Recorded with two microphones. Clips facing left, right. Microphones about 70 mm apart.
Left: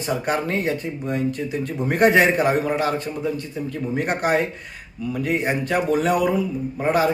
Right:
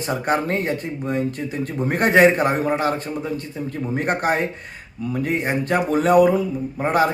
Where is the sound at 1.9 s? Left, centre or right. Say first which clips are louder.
Right 1 dB; right.